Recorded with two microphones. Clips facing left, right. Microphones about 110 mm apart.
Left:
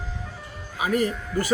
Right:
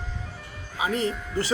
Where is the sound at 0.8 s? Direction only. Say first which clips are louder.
Left 3 dB; 25° right (ahead or behind).